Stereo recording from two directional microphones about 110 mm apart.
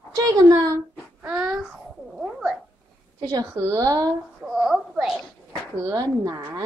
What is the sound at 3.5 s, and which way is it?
Speech, 25° right (ahead or behind).